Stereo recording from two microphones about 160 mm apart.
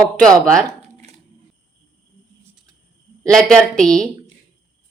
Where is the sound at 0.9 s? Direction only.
45° right (ahead or behind).